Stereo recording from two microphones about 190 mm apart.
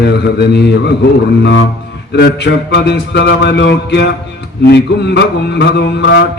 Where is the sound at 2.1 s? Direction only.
60° left (ahead or behind).